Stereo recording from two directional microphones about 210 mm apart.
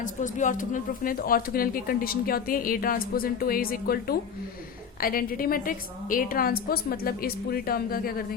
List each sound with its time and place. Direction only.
0.0 s speech: 35° left (ahead or behind)